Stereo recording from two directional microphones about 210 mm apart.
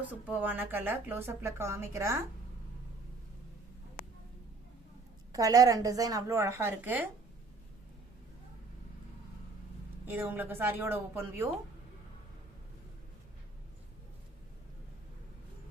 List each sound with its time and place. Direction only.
0.1 s speech: 10° right (ahead or behind)
5.3 s speech: 15° right (ahead or behind)
10.1 s speech: 10° right (ahead or behind)